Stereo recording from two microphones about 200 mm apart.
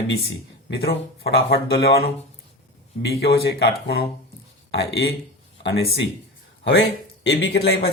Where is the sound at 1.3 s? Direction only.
55° left (ahead or behind).